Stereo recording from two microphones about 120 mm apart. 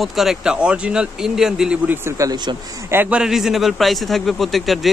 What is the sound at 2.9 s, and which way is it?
A man's voice, 5° right (ahead or behind).